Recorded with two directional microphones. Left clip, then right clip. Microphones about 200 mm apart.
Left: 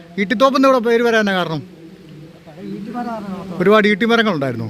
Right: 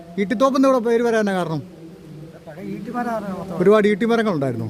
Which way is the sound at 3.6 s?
10° right (ahead or behind).